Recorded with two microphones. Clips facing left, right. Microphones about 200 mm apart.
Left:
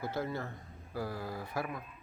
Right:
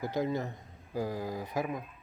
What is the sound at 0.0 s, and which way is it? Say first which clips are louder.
Speech: right 5 dB; 15° right (ahead or behind).